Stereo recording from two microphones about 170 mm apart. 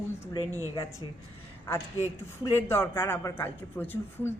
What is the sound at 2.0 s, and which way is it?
Speech, 15° left (ahead or behind).